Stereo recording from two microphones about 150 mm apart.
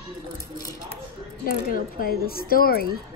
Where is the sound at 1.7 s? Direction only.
70° left (ahead or behind).